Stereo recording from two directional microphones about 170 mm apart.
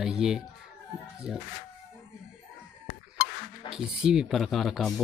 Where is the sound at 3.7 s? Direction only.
5° right (ahead or behind).